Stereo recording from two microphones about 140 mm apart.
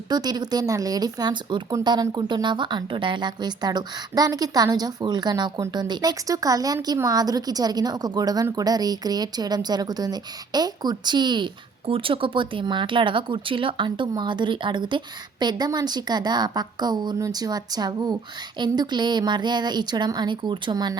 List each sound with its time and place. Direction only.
0.1 s a woman's voice: 30° right (ahead or behind)